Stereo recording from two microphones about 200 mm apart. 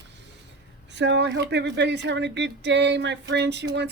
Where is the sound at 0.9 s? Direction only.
60° right (ahead or behind).